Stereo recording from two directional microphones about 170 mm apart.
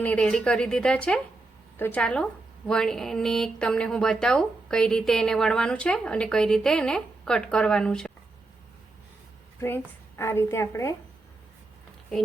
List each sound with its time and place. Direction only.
0.0 s speech: 5° left (ahead or behind)
9.6 s a woman's voice: 15° left (ahead or behind)